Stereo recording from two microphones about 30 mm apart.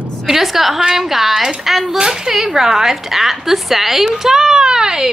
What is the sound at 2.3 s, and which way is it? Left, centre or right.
A woman's voice, centre.